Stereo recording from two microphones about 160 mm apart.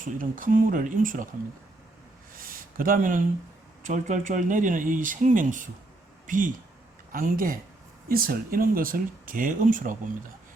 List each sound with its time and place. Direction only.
0.0 s speech: 55° right (ahead or behind)
2.4 s a sound: 60° right (ahead or behind)
3.8 s speech: 50° right (ahead or behind)